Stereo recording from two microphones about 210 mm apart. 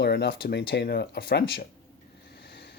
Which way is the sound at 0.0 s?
50° left (ahead or behind).